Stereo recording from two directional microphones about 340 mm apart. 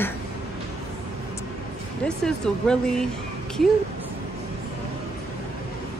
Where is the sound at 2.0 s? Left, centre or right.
Centre.